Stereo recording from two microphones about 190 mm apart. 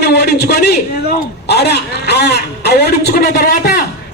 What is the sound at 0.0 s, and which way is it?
A man's voice, 60° left (ahead or behind).